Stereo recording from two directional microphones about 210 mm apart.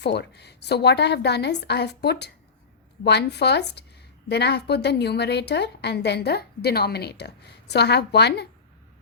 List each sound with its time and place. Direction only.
0.0 s a woman's voice: 55° left (ahead or behind)